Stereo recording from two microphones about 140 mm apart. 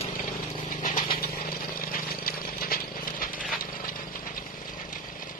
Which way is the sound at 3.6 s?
85° left.